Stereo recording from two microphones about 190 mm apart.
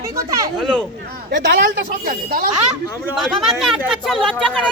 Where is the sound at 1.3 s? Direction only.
65° right (ahead or behind).